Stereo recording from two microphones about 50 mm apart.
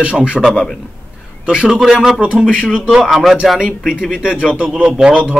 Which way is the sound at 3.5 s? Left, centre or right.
Centre.